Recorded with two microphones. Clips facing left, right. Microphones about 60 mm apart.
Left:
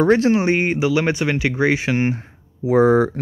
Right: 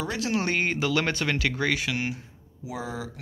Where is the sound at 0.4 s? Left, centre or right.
Left.